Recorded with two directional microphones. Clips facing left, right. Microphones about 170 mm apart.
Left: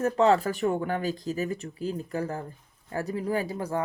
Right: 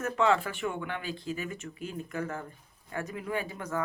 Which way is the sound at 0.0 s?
35° left (ahead or behind).